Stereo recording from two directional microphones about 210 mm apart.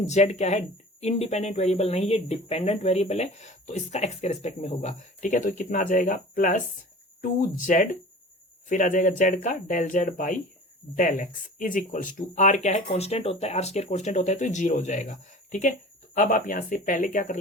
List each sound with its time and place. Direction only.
0.0 s speech: 35° left (ahead or behind)
7.6 s speech: 40° left (ahead or behind)